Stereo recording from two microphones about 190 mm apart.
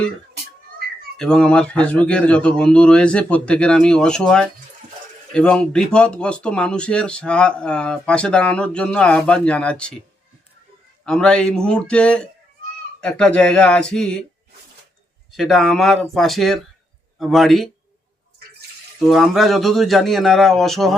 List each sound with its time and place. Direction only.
1.1 s speech: 5° left (ahead or behind)
11.0 s speech: 5° left (ahead or behind)
15.4 s speech: centre (ahead or behind)
18.9 s speech: centre (ahead or behind)